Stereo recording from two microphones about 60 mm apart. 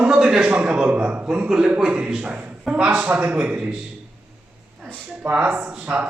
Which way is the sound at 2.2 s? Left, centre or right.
Right.